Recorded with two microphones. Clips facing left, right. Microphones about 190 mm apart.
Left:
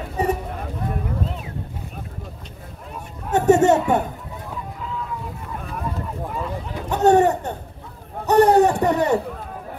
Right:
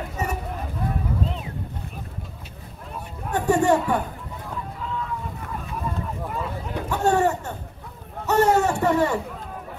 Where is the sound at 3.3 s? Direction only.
20° left (ahead or behind).